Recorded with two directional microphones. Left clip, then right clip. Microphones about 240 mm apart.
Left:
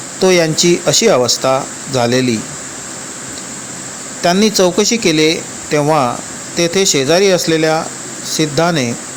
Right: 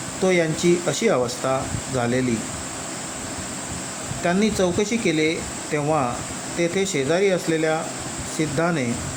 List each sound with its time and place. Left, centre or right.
0.2 s speech: left
4.2 s speech: left